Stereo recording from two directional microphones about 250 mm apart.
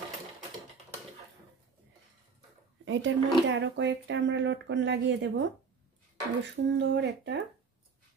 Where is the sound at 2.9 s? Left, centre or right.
Right.